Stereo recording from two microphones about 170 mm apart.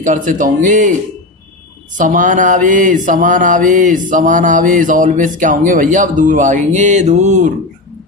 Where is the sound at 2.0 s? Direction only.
50° right (ahead or behind).